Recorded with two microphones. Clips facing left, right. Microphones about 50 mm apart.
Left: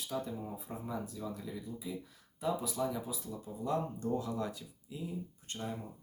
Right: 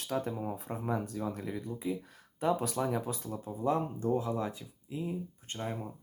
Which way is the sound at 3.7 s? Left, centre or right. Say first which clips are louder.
Right 4 dB; right.